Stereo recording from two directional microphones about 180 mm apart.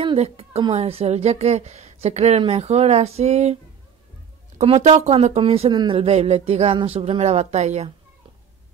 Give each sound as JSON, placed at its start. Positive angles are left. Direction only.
{"t": 0.0, "sound": "a woman's voice", "side_deg": -30}
{"t": 4.8, "sound": "a woman's voice", "side_deg": -40}